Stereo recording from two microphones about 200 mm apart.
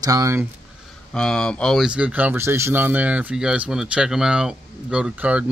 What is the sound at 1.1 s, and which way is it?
Speech, 5° left (ahead or behind).